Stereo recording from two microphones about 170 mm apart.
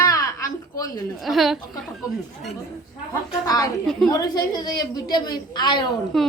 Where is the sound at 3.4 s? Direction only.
20° left (ahead or behind).